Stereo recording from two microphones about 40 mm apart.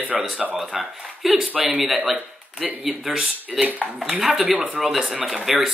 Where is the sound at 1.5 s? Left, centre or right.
Right.